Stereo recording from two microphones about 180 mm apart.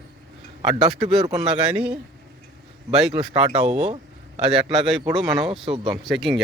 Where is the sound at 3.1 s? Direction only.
35° right (ahead or behind).